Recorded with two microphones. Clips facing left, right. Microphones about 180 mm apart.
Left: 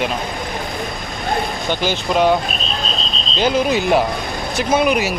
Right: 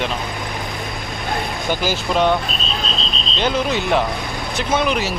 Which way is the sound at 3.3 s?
10° left (ahead or behind).